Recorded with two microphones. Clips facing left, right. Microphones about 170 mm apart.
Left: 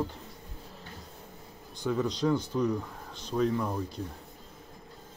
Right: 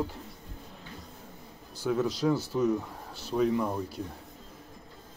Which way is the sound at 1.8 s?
5° right (ahead or behind).